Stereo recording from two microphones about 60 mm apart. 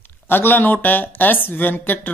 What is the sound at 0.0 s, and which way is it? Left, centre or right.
Speech, left.